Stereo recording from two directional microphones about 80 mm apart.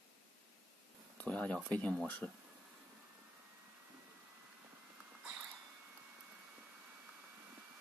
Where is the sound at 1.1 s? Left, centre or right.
Centre.